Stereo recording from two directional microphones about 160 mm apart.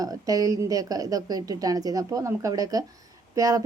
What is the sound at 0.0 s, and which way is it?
A woman's voice, 20° right (ahead or behind).